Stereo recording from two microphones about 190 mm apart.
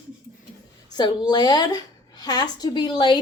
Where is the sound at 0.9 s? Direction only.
25° left (ahead or behind).